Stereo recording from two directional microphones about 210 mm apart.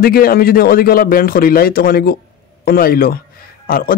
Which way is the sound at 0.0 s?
45° left (ahead or behind).